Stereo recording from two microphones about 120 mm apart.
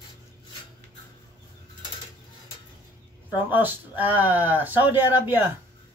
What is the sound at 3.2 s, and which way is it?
Speech, 15° right (ahead or behind).